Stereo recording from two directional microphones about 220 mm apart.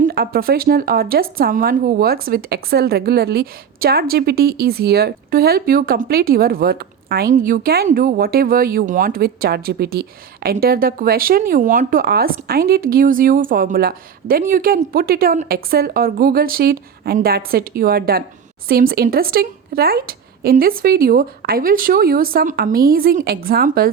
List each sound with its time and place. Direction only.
0.0 s speech: 45° right (ahead or behind)